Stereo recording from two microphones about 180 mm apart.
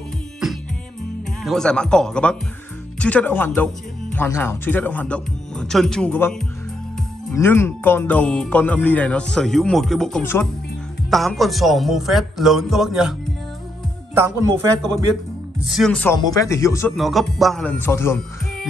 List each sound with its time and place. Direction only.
1.4 s speech: centre (ahead or behind)
7.3 s speech: 15° left (ahead or behind)
14.1 s a man's voice: 15° right (ahead or behind)
15.7 s speech: 5° left (ahead or behind)
16.2 s speech: 20° left (ahead or behind)
16.9 s speech: centre (ahead or behind)